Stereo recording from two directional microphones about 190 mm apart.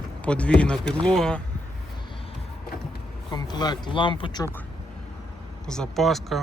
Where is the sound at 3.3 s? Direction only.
20° left (ahead or behind).